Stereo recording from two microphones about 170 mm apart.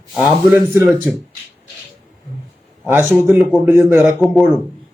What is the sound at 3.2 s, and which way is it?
Speech, 15° right (ahead or behind).